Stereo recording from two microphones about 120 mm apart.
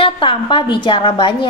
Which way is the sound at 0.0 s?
45° left (ahead or behind).